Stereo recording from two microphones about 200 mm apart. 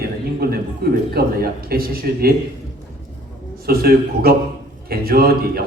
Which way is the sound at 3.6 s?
50° right (ahead or behind).